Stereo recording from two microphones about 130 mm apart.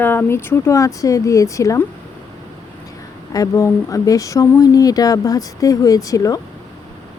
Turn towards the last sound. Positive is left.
turn(degrees=25)  # may be behind; listen again after turning